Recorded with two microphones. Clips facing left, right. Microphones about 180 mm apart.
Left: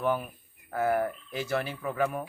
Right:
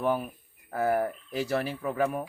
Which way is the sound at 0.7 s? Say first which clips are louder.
Right 1 dB; 35° right (ahead or behind).